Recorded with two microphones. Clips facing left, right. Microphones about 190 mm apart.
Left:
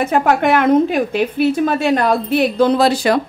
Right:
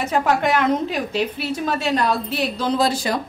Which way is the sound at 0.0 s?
55° left (ahead or behind).